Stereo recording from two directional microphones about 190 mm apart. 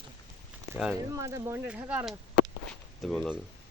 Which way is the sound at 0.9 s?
15° right (ahead or behind).